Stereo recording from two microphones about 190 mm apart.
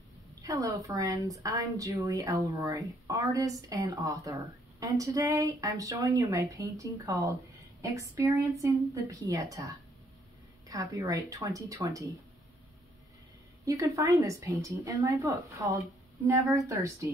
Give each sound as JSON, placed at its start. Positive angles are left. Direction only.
{"t": 0.4, "sound": "speech", "side_deg": -15}
{"t": 13.7, "sound": "speech", "side_deg": -15}